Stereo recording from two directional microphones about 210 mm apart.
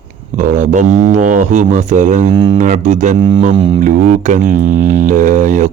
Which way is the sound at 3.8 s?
35° right (ahead or behind).